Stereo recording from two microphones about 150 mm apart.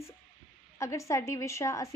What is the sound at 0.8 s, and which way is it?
A woman's voice, 20° left (ahead or behind).